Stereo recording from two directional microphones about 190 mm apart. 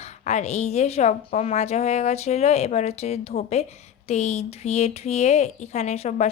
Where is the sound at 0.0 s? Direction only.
35° left (ahead or behind).